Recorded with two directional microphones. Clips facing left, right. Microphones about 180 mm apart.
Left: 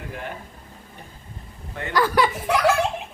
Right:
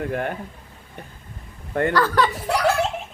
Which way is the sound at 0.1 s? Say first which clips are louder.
Right 8 dB; 55° right (ahead or behind).